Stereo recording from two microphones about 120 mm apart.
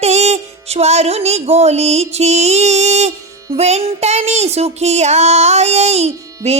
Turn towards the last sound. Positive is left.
turn(degrees=-65)  # may be behind; listen again after turning